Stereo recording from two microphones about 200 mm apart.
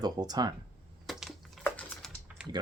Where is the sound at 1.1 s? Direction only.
Centre (ahead or behind).